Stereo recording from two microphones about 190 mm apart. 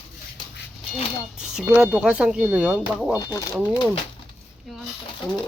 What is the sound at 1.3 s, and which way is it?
Speech, 5° right (ahead or behind).